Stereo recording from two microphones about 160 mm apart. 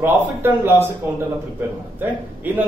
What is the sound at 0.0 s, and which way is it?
Speech, 15° right (ahead or behind).